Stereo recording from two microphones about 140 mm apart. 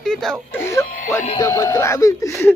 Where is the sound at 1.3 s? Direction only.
25° left (ahead or behind).